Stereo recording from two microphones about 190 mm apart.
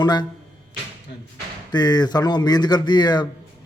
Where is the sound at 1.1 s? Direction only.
60° left (ahead or behind).